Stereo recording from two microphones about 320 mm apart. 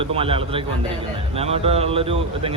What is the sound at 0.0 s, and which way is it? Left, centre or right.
A man's voice, centre.